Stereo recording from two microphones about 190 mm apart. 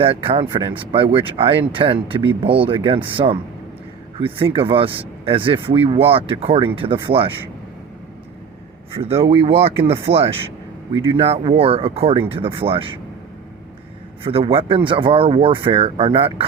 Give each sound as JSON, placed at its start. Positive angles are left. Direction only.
{"t": 0.0, "sound": "speech", "side_deg": -30}
{"t": 9.0, "sound": "speech", "side_deg": -30}
{"t": 14.3, "sound": "speech", "side_deg": -30}